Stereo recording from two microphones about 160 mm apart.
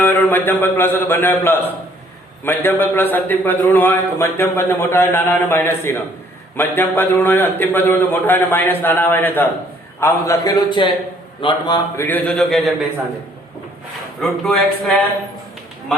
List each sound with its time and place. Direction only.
0.0 s a man's voice: 10° left (ahead or behind); by 11.8 s 30° left (ahead or behind)
11.9 s a man's voice: 10° left (ahead or behind)
14.2 s speech: 5° left (ahead or behind)